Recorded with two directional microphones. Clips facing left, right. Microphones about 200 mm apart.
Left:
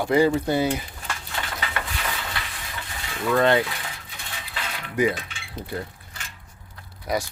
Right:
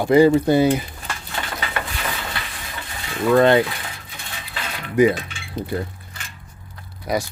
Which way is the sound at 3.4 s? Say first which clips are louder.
Right 4 dB; 20° right (ahead or behind).